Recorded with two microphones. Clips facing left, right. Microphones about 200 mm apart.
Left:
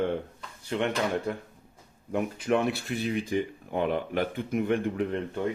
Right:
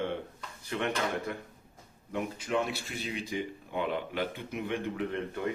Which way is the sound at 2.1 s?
55° left (ahead or behind).